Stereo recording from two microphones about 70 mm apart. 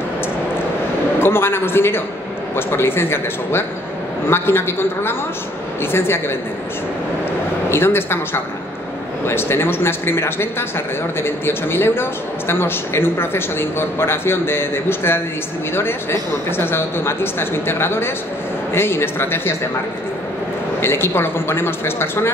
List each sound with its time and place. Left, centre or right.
1.2 s a man's voice: left
7.7 s a man's voice: left
20.8 s a man's voice: left